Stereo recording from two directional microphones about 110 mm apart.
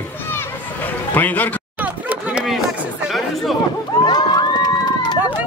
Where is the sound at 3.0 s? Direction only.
Centre (ahead or behind).